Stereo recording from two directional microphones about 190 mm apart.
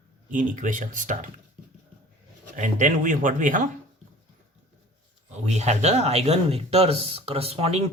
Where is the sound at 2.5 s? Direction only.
40° right (ahead or behind).